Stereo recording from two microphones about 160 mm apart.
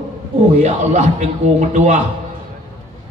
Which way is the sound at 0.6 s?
45° right (ahead or behind).